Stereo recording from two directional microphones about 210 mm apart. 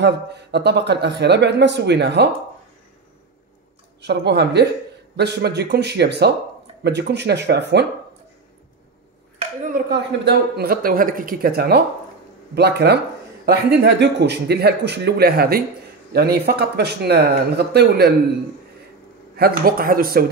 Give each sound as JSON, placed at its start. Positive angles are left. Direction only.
{"t": 0.0, "sound": "speech", "side_deg": -55}
{"t": 4.0, "sound": "speech", "side_deg": -50}
{"t": 9.7, "sound": "speech", "side_deg": -50}
{"t": 19.3, "sound": "speech", "side_deg": -45}